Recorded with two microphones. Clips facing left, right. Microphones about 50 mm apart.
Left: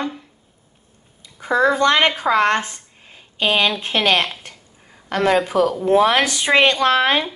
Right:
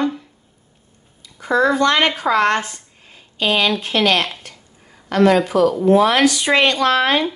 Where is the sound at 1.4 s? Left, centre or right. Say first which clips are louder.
Right 1 dB; centre.